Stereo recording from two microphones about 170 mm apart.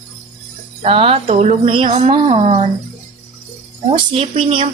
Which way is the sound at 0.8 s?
35° right (ahead or behind).